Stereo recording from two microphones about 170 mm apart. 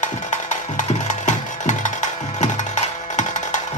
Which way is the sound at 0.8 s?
45° left (ahead or behind).